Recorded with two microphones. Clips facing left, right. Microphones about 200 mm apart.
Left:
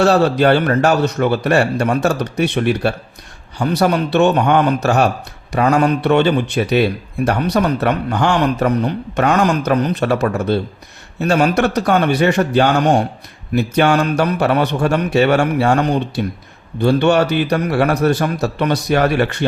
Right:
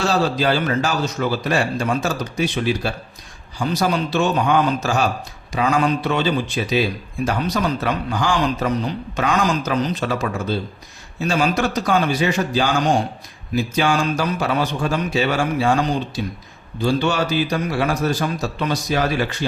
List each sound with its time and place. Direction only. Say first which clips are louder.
0.0 s speech: left 7 dB; 65° left (ahead or behind)